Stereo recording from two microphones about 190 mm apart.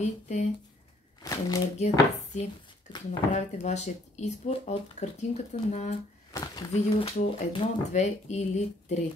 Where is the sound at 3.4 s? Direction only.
35° left (ahead or behind).